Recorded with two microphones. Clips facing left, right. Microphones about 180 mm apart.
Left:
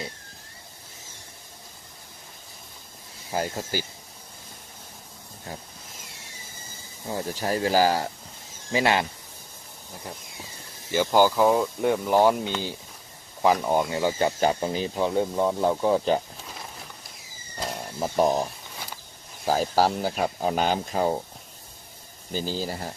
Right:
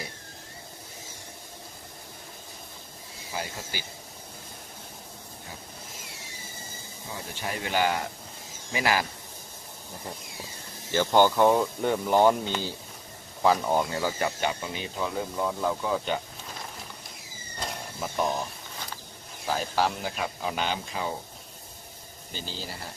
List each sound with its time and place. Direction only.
3.3 s speech: 45° left (ahead or behind)
7.1 s speech: 40° left (ahead or behind)
10.9 s speech: 10° left (ahead or behind)
13.4 s speech: 15° left (ahead or behind)
14.2 s speech: 35° left (ahead or behind)
18.0 s speech: 40° left (ahead or behind)
19.5 s speech: 40° left (ahead or behind)
22.3 s speech: 45° left (ahead or behind)